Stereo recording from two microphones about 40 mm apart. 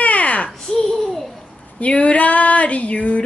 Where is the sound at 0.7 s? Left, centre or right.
Centre.